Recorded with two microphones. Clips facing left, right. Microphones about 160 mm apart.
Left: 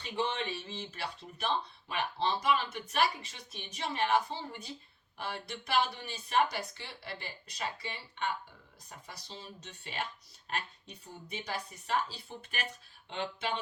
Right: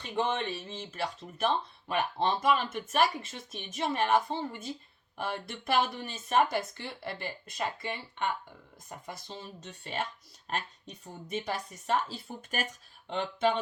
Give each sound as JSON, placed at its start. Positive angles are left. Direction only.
{"t": 0.0, "sound": "speech", "side_deg": -50}